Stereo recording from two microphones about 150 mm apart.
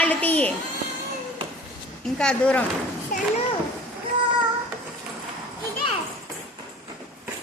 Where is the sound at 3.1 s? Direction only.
65° left (ahead or behind).